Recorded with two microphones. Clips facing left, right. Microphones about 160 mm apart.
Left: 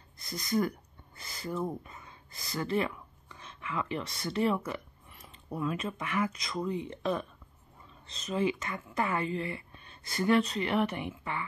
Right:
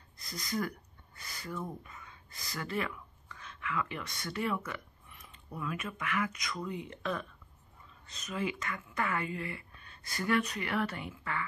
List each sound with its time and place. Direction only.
0.2 s speech: 25° left (ahead or behind)